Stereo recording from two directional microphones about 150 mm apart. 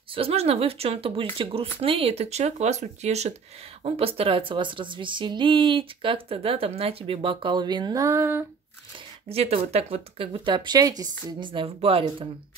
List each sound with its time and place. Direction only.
0.1 s speech: 40° right (ahead or behind); by 8.5 s 15° right (ahead or behind)
9.3 s speech: 40° right (ahead or behind)